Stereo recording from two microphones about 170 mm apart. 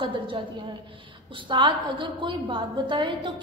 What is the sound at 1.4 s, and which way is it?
A woman's voice, 30° right (ahead or behind).